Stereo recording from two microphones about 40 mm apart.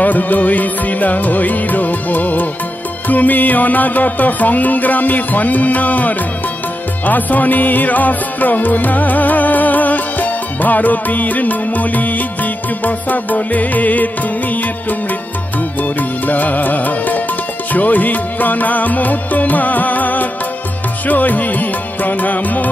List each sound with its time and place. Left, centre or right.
0.0 s music: left